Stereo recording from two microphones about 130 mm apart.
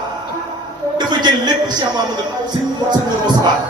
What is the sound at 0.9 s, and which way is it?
A man's voice, 35° right (ahead or behind).